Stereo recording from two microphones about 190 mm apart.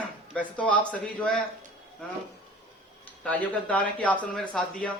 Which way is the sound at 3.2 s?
5° left (ahead or behind).